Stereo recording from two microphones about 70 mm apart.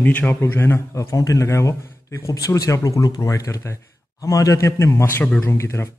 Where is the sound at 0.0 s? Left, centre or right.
Left.